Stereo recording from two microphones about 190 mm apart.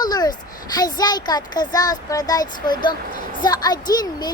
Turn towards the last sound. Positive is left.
turn(degrees=20)  # may be behind; listen again after turning